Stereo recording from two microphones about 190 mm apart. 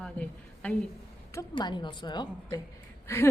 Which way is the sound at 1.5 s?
25° left (ahead or behind).